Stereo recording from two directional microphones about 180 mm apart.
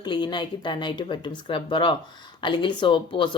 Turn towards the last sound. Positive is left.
turn(degrees=25)  # may be behind; listen again after turning